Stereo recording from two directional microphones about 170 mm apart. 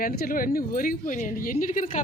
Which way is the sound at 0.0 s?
60° left (ahead or behind).